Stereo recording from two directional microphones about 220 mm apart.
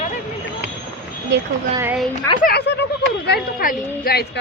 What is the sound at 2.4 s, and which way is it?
A woman's voice, 45° left (ahead or behind).